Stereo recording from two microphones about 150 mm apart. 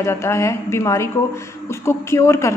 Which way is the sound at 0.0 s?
20° left (ahead or behind).